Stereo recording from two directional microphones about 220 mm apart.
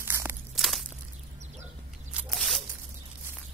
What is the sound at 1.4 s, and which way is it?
Horse, 30° right (ahead or behind).